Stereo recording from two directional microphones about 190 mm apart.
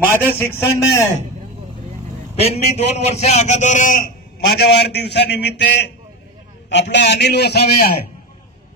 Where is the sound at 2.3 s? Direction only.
35° left (ahead or behind); by 5.6 s 60° left (ahead or behind).